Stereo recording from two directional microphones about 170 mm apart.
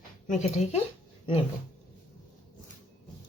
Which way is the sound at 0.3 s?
40° left (ahead or behind).